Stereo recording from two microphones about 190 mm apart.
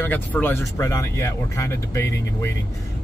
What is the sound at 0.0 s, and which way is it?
Speech, 10° left (ahead or behind).